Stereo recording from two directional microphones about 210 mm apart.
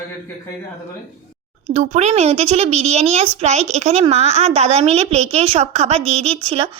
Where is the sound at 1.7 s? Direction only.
30° right (ahead or behind).